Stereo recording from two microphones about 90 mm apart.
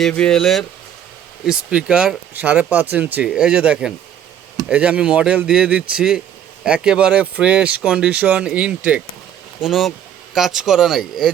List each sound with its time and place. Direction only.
0.3 s speech: 5° left (ahead or behind)
1.5 s speech: 10° right (ahead or behind)
9.6 s speech: 5° right (ahead or behind)